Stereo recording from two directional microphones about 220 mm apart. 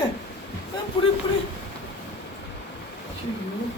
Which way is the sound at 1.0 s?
20° left (ahead or behind).